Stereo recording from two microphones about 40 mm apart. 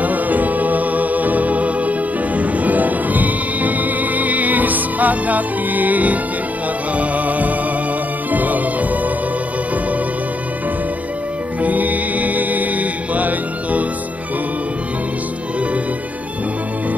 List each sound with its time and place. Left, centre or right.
0.0 s music: right
11.6 s music: right